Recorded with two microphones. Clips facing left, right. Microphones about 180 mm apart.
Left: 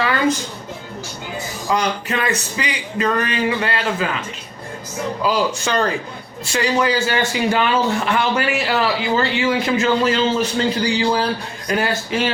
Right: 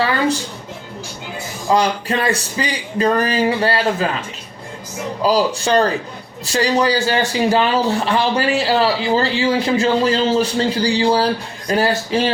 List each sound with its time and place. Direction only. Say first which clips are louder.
1.7 s speech: right 4 dB; 30° right (ahead or behind)
5.2 s speech: right 4 dB; 35° right (ahead or behind)